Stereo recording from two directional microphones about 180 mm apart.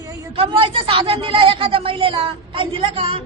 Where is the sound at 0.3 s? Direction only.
30° right (ahead or behind).